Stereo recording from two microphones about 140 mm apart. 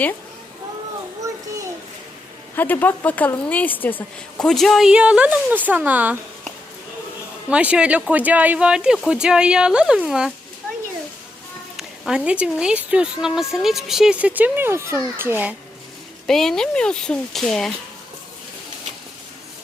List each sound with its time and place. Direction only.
1.2 s a sound: 20° right (ahead or behind)
2.6 s a woman's voice: 15° left (ahead or behind); by 6.1 s 10° right (ahead or behind)
7.5 s a woman's voice: 10° right (ahead or behind)
11.8 s speech: 5° right (ahead or behind)
16.2 s a woman's voice: 5° left (ahead or behind)